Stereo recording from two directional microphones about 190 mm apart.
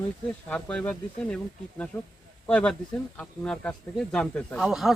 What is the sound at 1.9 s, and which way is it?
Speech, 15° left (ahead or behind).